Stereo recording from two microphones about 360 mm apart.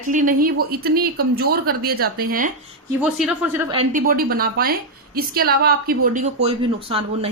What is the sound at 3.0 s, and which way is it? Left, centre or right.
A woman's voice, centre.